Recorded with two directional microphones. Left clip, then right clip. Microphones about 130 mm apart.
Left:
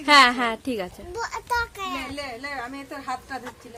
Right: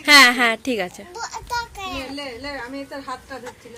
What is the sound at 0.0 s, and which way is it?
Speech, 15° right (ahead or behind).